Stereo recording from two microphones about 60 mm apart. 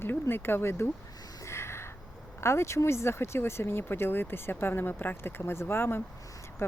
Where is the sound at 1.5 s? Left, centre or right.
Left.